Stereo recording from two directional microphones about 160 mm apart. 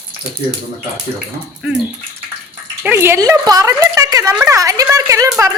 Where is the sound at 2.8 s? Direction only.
15° right (ahead or behind).